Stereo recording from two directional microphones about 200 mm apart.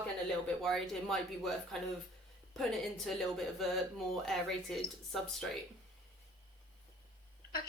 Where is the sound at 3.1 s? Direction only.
Centre (ahead or behind).